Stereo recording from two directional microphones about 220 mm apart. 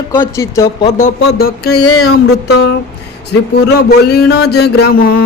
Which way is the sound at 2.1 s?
50° left (ahead or behind).